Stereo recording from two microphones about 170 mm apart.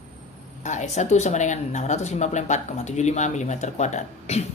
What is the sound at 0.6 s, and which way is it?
Speech, 45° left (ahead or behind).